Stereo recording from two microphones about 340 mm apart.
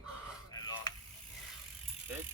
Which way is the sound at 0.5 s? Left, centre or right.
Centre.